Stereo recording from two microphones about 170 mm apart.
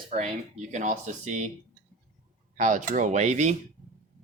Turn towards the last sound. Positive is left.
turn(degrees=-40)  # may be behind; listen again after turning